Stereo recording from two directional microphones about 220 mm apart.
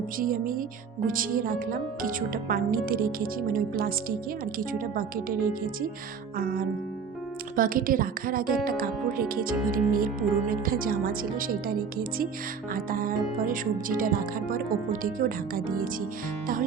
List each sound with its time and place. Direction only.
0.2 s speech: 40° right (ahead or behind)
6.3 s speech: 40° right (ahead or behind)